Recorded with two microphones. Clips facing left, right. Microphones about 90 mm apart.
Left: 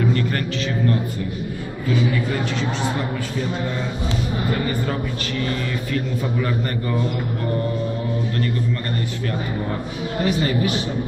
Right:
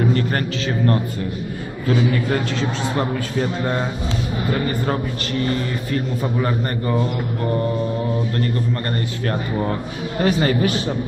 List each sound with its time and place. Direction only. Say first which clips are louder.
0.0 s a man's voice: right 2 dB; 40° right (ahead or behind)
5.4 s a man's voice: right 3 dB; 35° right (ahead or behind)
10.2 s a man's voice: right 3 dB; 50° right (ahead or behind)